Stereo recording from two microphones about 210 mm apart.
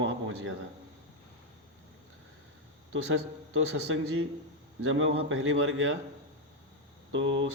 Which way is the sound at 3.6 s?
70° right (ahead or behind).